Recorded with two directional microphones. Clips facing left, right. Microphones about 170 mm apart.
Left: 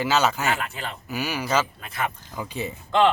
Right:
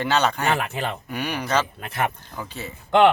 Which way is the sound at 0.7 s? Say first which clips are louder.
Right 7 dB; 70° right (ahead or behind).